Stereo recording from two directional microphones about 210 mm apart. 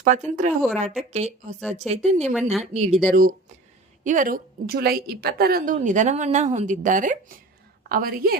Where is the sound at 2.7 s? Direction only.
35° right (ahead or behind).